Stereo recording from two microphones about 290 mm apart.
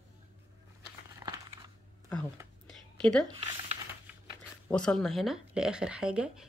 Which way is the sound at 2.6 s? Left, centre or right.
Centre.